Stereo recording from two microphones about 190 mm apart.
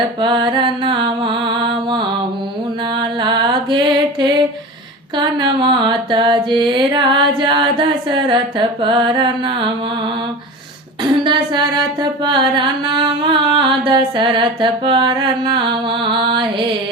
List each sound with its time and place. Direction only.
0.2 s music: 25° right (ahead or behind)
5.1 s music: 25° right (ahead or behind)
11.2 s music: 25° right (ahead or behind)